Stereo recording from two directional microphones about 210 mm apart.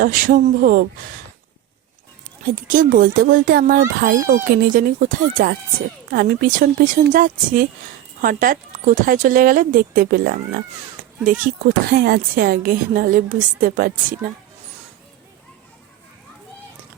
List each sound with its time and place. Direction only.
0.0 s speech: 40° right (ahead or behind)
2.4 s a woman's voice: 40° right (ahead or behind)